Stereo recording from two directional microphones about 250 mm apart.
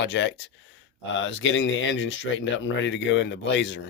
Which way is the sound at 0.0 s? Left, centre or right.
Left.